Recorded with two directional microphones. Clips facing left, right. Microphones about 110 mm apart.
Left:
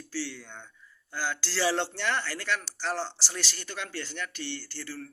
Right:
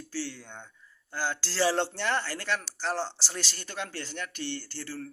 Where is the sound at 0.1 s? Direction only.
40° right (ahead or behind).